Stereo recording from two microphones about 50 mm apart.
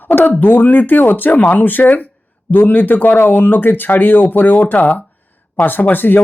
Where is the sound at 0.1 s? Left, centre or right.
Left.